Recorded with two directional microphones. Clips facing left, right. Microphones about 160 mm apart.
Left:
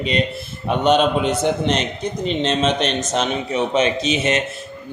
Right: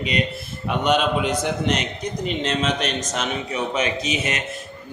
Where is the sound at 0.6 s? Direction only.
25° left (ahead or behind).